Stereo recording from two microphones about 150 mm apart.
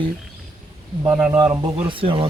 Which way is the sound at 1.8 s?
35° right (ahead or behind).